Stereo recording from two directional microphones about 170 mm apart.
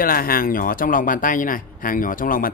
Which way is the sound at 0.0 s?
60° left (ahead or behind).